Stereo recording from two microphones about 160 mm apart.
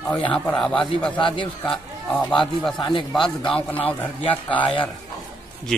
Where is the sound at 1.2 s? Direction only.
30° left (ahead or behind).